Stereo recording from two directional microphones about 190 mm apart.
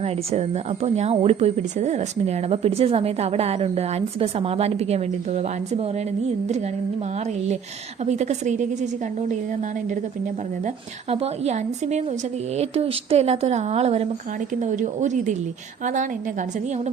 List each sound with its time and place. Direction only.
0.0 s a woman's voice: 35° right (ahead or behind)
8.0 s a woman's voice: 35° right (ahead or behind)
11.1 s a woman's voice: 35° right (ahead or behind)